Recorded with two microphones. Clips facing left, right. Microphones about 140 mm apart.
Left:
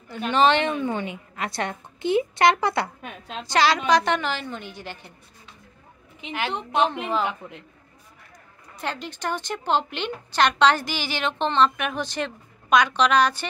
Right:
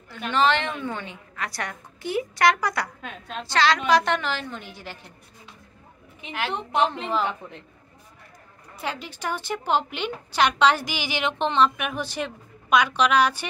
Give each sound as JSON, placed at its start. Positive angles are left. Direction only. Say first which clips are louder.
{"t": 0.3, "sound": "a woman's voice", "louder": "left 3 dB", "side_deg": 20}
{"t": 3.8, "sound": "a woman's voice", "louder": "even", "side_deg": 0}
{"t": 6.5, "sound": "a woman's voice", "louder": "even", "side_deg": 25}
{"t": 7.2, "sound": "a woman's voice", "louder": "even", "side_deg": 15}
{"t": 8.7, "sound": "a woman's voice", "louder": "left 1 dB", "side_deg": -5}